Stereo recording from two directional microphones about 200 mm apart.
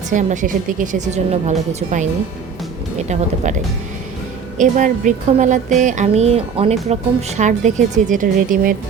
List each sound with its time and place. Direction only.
0.1 s speech: 40° right (ahead or behind)
4.5 s speech: 40° right (ahead or behind)